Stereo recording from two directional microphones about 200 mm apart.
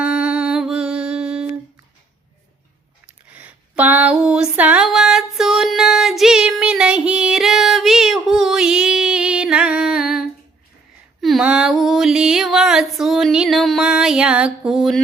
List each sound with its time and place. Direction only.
0.0 s music: 5° right (ahead or behind)
3.2 s female singing: 5° right (ahead or behind)
11.2 s a sound: centre (ahead or behind)